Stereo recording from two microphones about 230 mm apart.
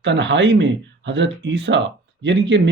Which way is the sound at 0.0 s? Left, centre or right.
Right.